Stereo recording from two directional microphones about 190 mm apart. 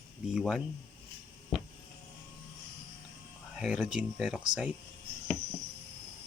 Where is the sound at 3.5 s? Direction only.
5° right (ahead or behind).